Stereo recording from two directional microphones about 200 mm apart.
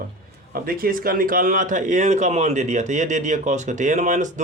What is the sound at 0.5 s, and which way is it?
Speech, 45° right (ahead or behind).